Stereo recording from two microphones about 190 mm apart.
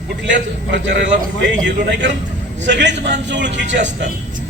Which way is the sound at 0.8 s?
70° right (ahead or behind).